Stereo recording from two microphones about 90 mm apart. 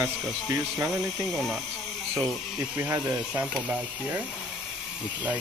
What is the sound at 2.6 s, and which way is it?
Speech, 25° right (ahead or behind).